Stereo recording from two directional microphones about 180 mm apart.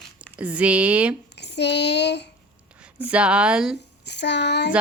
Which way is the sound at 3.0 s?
5° right (ahead or behind).